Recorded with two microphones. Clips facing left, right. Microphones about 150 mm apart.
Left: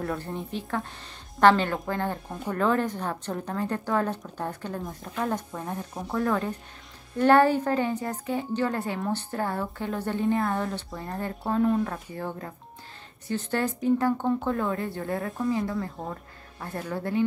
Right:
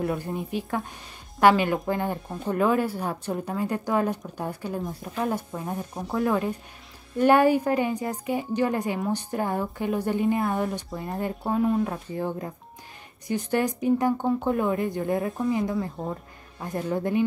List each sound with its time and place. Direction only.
0.0 s speech: 15° right (ahead or behind)